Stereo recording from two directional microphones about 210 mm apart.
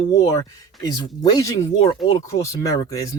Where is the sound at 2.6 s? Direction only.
15° left (ahead or behind).